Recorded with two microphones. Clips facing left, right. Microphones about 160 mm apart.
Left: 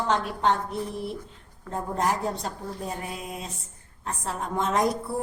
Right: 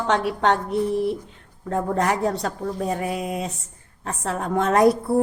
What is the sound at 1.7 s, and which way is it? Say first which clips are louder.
A woman's voice: right 5 dB; 85° right.